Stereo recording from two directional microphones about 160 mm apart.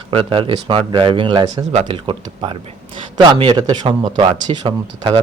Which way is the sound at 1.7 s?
40° right (ahead or behind).